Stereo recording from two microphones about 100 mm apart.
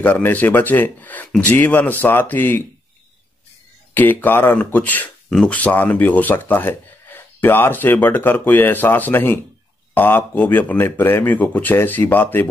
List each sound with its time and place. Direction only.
0.0 s speech: 15° left (ahead or behind)
3.9 s speech: 20° left (ahead or behind)